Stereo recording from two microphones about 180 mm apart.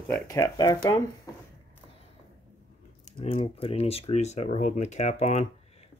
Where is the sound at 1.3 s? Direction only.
20° left (ahead or behind).